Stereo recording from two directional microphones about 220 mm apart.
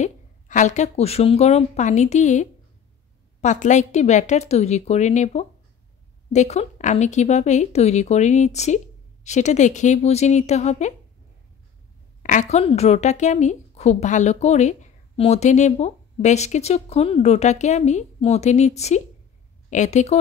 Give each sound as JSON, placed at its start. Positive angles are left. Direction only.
{"t": 0.0, "sound": "a woman's voice", "side_deg": 35}
{"t": 12.2, "sound": "a woman's voice", "side_deg": 35}